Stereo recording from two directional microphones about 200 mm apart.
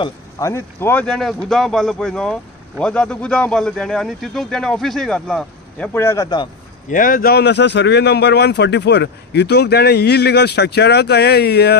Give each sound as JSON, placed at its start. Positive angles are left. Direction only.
{"t": 0.0, "sound": "speech", "side_deg": 15}
{"t": 5.9, "sound": "a man's voice", "side_deg": 15}
{"t": 6.9, "sound": "a man's voice", "side_deg": 45}